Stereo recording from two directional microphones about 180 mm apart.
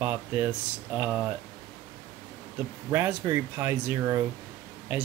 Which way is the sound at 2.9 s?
15° right (ahead or behind).